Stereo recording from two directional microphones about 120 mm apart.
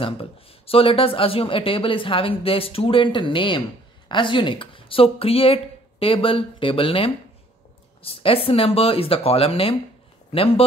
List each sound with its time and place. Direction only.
0.0 s speech: 50° left (ahead or behind)